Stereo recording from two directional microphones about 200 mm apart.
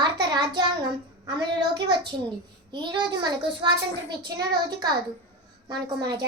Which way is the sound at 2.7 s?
25° right (ahead or behind).